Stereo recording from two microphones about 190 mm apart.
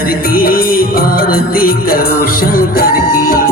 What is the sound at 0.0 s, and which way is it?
Music, 50° left (ahead or behind).